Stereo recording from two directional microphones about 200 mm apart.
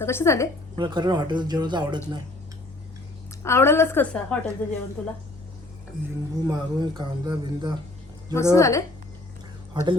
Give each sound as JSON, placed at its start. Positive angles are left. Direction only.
{"t": 0.0, "sound": "a woman's voice", "side_deg": 10}
{"t": 0.8, "sound": "speech", "side_deg": -20}
{"t": 3.4, "sound": "a woman's voice", "side_deg": 10}
{"t": 6.4, "sound": "speech", "side_deg": -20}
{"t": 8.3, "sound": "a woman's voice", "side_deg": 15}
{"t": 9.7, "sound": "speech", "side_deg": -25}